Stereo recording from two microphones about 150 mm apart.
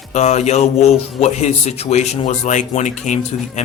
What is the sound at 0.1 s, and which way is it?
A man's voice, 50° left (ahead or behind).